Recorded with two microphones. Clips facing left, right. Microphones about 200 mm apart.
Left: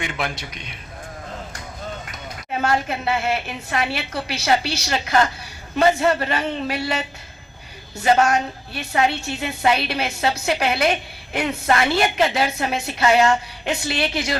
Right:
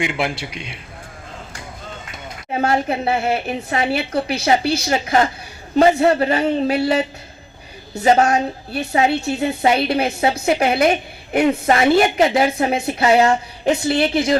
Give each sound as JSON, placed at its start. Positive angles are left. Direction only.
{"t": 0.0, "sound": "a man's voice", "side_deg": -15}
{"t": 0.3, "sound": "a woman's voice", "side_deg": -30}
{"t": 2.5, "sound": "a woman's voice", "side_deg": -30}
{"t": 4.1, "sound": "speech", "side_deg": -55}
{"t": 4.9, "sound": "a woman's voice", "side_deg": -25}
{"t": 8.0, "sound": "a woman's voice", "side_deg": -30}